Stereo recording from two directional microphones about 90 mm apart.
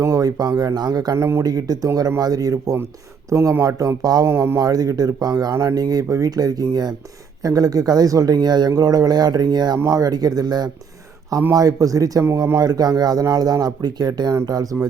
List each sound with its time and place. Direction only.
0.0 s speech: 40° right (ahead or behind)
1.1 s speech: 30° right (ahead or behind)
1.4 s speech: 45° right (ahead or behind)
4.3 s speech: 30° right (ahead or behind)